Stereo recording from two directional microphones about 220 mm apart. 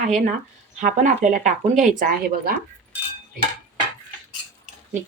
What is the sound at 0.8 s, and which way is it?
Speech, 35° right (ahead or behind).